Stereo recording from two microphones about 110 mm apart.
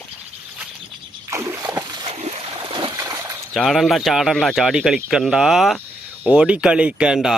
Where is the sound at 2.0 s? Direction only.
85° right.